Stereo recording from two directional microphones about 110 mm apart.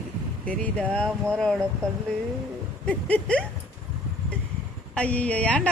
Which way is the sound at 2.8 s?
10° left (ahead or behind).